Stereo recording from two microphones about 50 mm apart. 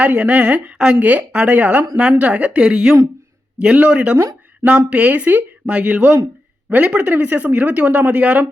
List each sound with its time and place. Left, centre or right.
0.0 s speech: right